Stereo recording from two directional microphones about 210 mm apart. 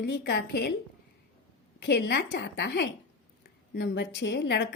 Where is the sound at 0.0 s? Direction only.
50° left (ahead or behind).